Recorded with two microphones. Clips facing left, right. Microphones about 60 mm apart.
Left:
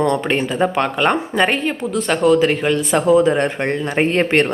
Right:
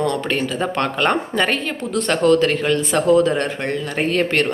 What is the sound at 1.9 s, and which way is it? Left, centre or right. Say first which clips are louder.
Speech: even; centre.